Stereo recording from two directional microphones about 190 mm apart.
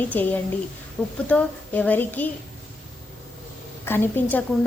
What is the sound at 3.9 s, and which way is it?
Speech, 10° left (ahead or behind).